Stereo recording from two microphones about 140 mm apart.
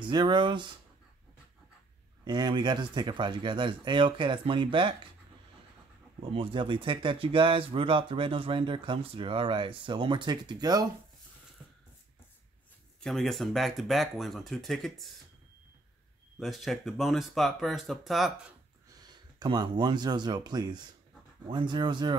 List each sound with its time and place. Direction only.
0.0 s speech: 30° right (ahead or behind)
2.2 s speech: 30° right (ahead or behind)
6.3 s speech: 40° right (ahead or behind)
13.0 s speech: centre (ahead or behind)
16.3 s speech: centre (ahead or behind)
19.4 s speech: 30° right (ahead or behind)